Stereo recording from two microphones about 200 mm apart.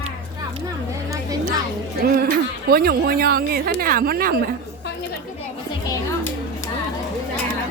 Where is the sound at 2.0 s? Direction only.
50° right (ahead or behind).